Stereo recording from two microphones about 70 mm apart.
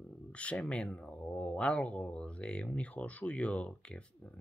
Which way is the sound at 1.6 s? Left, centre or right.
Centre.